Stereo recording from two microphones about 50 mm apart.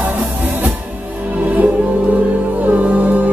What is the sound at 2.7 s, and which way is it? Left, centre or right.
Music, right.